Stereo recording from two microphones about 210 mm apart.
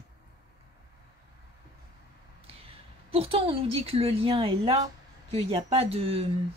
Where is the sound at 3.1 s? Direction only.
25° right (ahead or behind).